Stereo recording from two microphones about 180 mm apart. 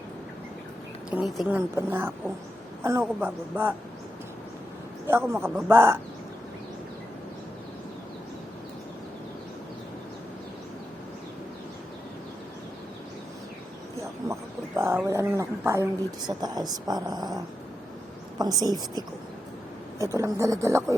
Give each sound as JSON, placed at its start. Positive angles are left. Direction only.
{"t": 1.1, "sound": "a woman's voice", "side_deg": -5}
{"t": 5.0, "sound": "a woman's voice", "side_deg": -15}
{"t": 14.8, "sound": "a woman's voice", "side_deg": -15}